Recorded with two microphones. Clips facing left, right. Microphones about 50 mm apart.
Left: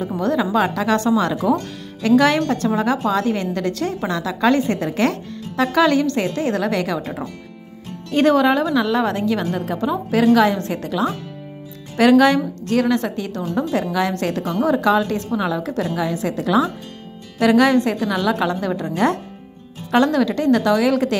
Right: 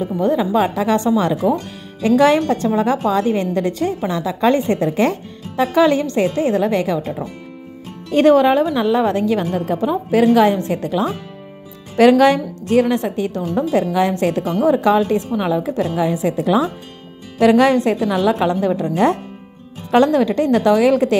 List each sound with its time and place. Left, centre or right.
0.2 s speech: centre
2.0 s a woman's voice: right
4.1 s speech: centre
4.4 s a woman's voice: right
8.1 s a woman's voice: right; by 14.7 s centre
14.7 s a woman's voice: right